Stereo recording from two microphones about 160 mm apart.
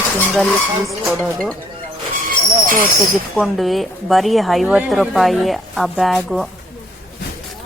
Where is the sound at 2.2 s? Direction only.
60° right (ahead or behind).